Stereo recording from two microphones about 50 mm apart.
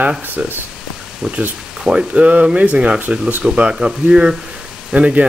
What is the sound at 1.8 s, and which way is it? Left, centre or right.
Speech, right.